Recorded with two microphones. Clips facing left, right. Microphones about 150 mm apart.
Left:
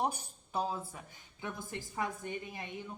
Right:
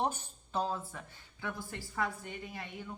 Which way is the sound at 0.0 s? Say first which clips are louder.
Even; 10° left (ahead or behind).